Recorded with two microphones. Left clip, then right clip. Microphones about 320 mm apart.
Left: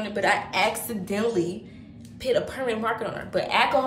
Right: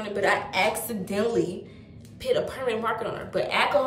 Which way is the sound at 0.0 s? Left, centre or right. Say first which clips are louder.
Left 1 dB; centre.